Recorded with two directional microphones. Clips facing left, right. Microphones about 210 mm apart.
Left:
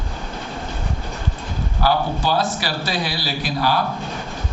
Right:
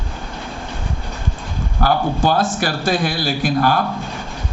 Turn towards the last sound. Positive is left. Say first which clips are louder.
# right 4 dB
turn(degrees=-50)  # may be behind; listen again after turning